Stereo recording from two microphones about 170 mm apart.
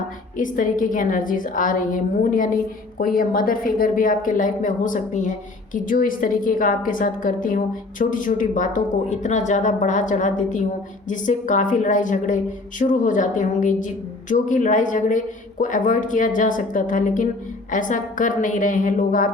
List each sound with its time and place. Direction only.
0.3 s speech: 50° left (ahead or behind)